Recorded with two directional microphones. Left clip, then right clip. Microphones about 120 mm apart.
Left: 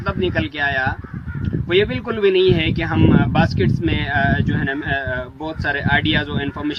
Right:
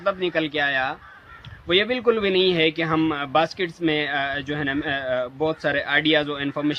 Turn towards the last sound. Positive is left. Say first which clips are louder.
# left 1 dB
turn(degrees=-15)  # may be behind; listen again after turning